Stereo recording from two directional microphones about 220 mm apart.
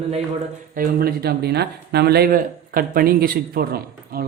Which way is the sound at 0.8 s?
45° right (ahead or behind).